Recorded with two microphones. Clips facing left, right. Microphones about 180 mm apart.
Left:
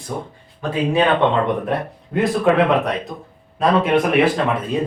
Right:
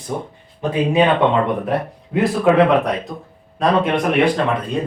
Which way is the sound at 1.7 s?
Centre (ahead or behind).